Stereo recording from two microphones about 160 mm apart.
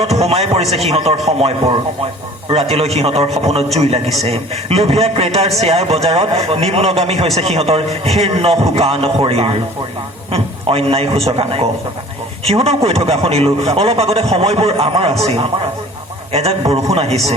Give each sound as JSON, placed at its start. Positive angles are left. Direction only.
{"t": 0.0, "sound": "a man's voice", "side_deg": -40}
{"t": 16.3, "sound": "a man's voice", "side_deg": -40}